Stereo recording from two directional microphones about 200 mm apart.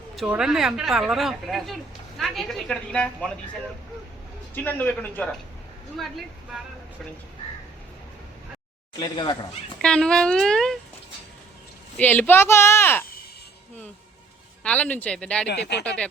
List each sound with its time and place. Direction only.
0.2 s speech: 5° right (ahead or behind)
4.5 s speech: 10° left (ahead or behind)
6.5 s speech: centre (ahead or behind)
9.0 s speech: 20° left (ahead or behind)
9.8 s speech: 5° left (ahead or behind)
11.9 s speech: 10° left (ahead or behind)
14.6 s speech: 5° left (ahead or behind)